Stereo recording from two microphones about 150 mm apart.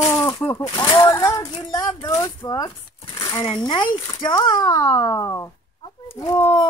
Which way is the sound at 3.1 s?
25° left (ahead or behind).